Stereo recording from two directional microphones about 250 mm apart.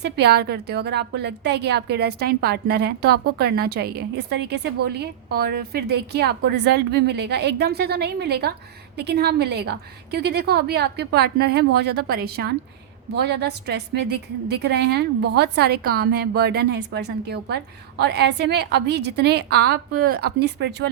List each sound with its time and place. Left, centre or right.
0.0 s a woman's voice: right